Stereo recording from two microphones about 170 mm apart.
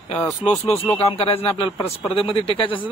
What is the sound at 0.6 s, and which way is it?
Speech, 15° left (ahead or behind).